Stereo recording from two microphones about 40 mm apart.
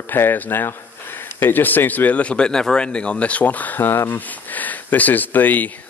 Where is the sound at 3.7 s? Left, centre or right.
Left.